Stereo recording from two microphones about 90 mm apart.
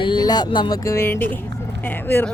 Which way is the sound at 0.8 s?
30° left (ahead or behind).